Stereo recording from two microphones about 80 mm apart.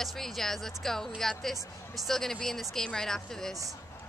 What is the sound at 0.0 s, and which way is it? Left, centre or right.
Speech, centre.